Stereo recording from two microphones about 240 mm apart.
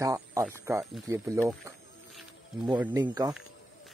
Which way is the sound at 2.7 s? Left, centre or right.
Centre.